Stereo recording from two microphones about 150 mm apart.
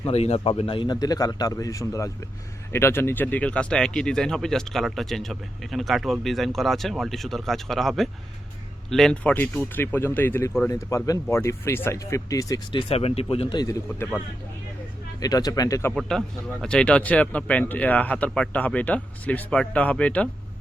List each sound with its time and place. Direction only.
0.0 s a man's voice: 45° left (ahead or behind); by 12.5 s 20° left (ahead or behind)
12.7 s speech: 40° left (ahead or behind)
15.2 s a man's voice: 25° left (ahead or behind)
16.0 s speech: 5° left (ahead or behind)